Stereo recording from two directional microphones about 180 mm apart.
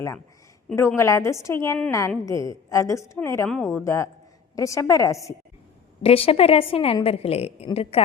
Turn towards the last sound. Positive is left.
turn(degrees=35)  # may be behind; listen again after turning